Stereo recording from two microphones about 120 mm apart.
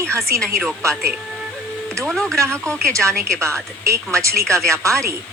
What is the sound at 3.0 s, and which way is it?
Speech, 25° right (ahead or behind).